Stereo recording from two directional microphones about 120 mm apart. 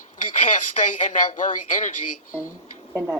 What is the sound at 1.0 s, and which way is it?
Speech, 90° left.